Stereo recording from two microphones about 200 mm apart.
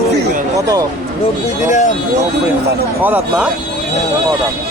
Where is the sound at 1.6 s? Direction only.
40° left (ahead or behind).